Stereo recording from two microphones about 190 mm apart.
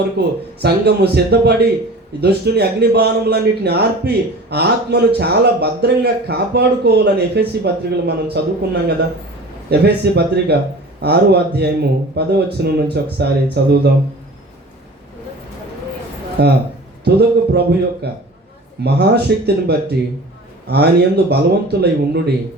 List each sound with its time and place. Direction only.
0.2 s speech: 55° right (ahead or behind)
16.4 s speech: 60° right (ahead or behind)